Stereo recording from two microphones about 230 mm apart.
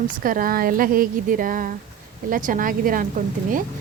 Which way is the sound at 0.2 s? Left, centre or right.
Right.